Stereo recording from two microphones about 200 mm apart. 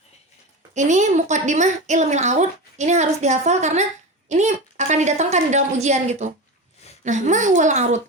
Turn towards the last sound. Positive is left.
turn(degrees=-35)  # may be behind; listen again after turning